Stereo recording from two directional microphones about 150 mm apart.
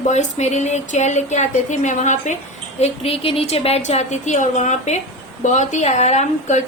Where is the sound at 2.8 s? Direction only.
45° left (ahead or behind).